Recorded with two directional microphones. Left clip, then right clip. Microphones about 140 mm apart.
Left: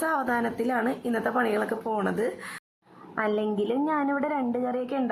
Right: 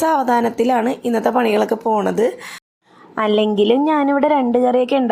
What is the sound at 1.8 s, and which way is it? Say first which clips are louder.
Speech: right 11 dB; 15° right (ahead or behind).